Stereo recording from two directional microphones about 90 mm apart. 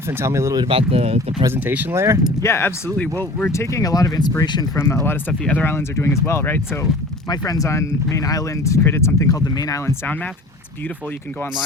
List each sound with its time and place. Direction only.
0.2 s speech: 30° right (ahead or behind)
0.7 s speech: 90° right
1.5 s speech: 20° right (ahead or behind)
2.4 s speech: 30° left (ahead or behind); by 4.6 s 50° left (ahead or behind)
4.7 s speech: 30° left (ahead or behind)
5.3 s speech: 10° left (ahead or behind)
5.6 s speech: 25° left (ahead or behind)
7.3 s speech: 45° left (ahead or behind)